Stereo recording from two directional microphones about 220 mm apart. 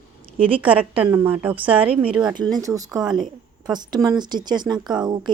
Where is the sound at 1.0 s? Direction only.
10° right (ahead or behind).